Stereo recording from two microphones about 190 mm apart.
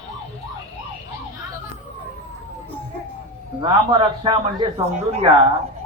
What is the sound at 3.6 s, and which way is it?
A man's voice, 25° right (ahead or behind).